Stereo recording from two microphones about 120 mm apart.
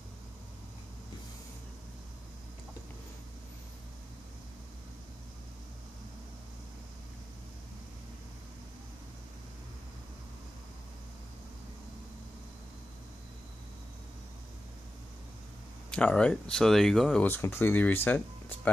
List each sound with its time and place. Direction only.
15.9 s speech: 10° left (ahead or behind)
17.2 s speech: 20° left (ahead or behind)